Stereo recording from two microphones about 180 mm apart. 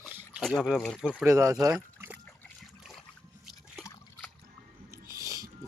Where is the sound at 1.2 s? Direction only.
15° right (ahead or behind).